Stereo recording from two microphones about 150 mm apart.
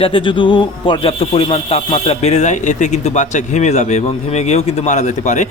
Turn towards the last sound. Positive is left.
turn(degrees=55)  # may be behind; listen again after turning